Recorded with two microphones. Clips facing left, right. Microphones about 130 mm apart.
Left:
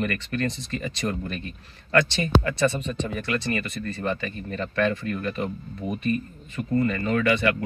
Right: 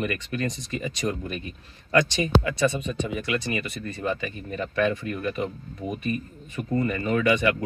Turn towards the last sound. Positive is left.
turn(degrees=-20)  # may be behind; listen again after turning